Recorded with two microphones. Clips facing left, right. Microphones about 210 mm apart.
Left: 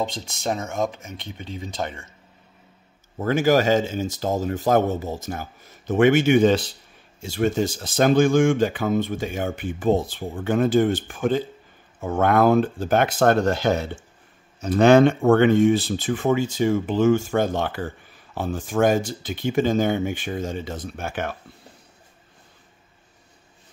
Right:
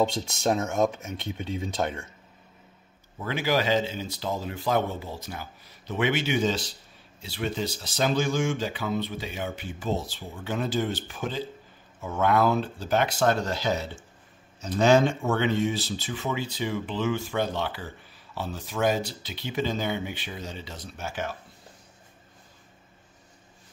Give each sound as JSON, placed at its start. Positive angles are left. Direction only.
{"t": 0.0, "sound": "speech", "side_deg": 0}
{"t": 3.2, "sound": "speech", "side_deg": 45}
{"t": 7.2, "sound": "speech", "side_deg": 45}